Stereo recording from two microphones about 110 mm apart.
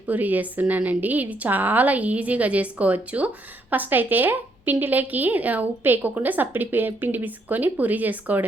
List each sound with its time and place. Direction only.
0.1 s a woman's voice: 15° right (ahead or behind)